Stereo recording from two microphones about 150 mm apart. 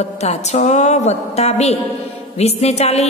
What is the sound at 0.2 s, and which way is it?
A woman's voice, 50° left (ahead or behind).